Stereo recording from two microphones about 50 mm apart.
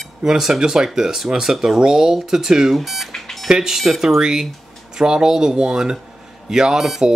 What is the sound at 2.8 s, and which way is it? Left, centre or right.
Alarm clock, centre.